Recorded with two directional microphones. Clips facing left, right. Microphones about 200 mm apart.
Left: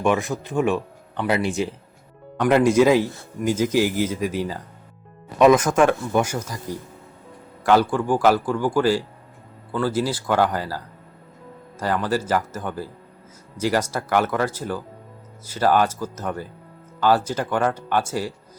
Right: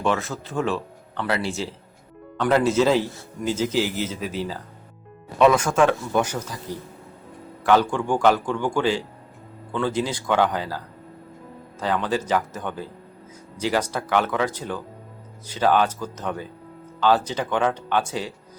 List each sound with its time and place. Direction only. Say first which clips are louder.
0.0 s a man's voice: left 3 dB; 15° left (ahead or behind)
11.8 s a man's voice: left 1 dB; 5° left (ahead or behind)